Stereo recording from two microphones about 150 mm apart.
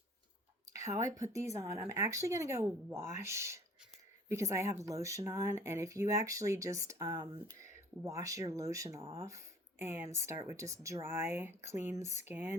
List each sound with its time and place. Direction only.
0.7 s speech: 20° right (ahead or behind)